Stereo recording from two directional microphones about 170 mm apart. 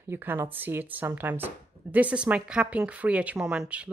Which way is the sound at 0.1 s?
15° right (ahead or behind).